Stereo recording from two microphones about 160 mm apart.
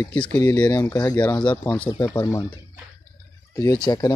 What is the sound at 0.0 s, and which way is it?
Speech, 10° left (ahead or behind).